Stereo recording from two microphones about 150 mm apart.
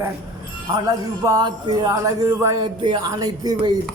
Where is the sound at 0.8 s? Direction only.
25° right (ahead or behind).